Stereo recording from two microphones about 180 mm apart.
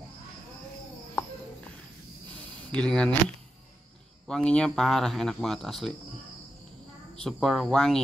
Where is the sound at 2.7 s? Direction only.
5° left (ahead or behind).